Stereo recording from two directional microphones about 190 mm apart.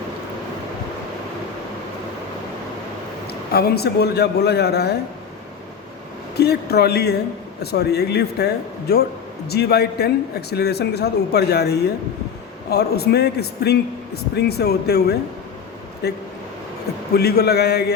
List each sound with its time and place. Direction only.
3.2 s a man's voice: 55° left (ahead or behind)
6.3 s a man's voice: 60° left (ahead or behind)